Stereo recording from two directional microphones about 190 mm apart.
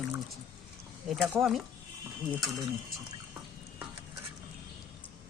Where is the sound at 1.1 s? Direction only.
Centre (ahead or behind).